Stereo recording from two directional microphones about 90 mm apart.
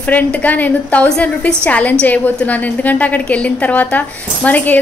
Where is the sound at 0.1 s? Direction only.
20° left (ahead or behind).